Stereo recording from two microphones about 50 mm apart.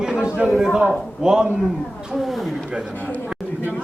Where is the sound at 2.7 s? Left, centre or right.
Centre.